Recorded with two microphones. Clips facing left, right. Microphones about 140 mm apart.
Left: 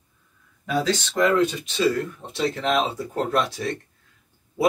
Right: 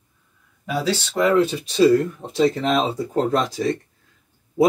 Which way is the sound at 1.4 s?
30° right (ahead or behind).